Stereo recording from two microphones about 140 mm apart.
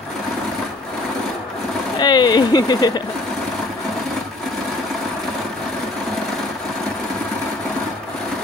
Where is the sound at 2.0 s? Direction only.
30° left (ahead or behind).